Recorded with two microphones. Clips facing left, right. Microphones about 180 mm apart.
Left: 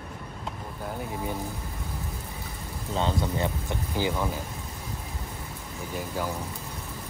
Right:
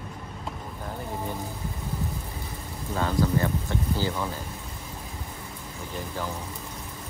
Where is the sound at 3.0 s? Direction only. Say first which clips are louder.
Right 2 dB; 25° left (ahead or behind).